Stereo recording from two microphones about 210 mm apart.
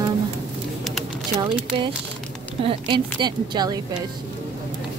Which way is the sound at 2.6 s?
20° right (ahead or behind).